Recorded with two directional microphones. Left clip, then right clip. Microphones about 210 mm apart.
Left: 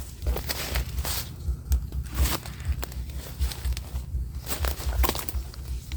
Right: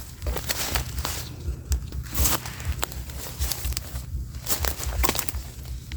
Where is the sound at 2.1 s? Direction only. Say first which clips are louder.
Right 4 dB; 35° right (ahead or behind).